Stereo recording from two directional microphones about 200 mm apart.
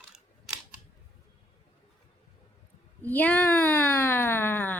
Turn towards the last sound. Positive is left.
turn(degrees=10)  # may be behind; listen again after turning